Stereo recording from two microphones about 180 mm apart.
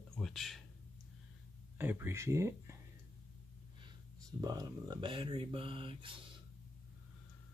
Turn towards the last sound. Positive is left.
turn(degrees=-30)  # may be behind; listen again after turning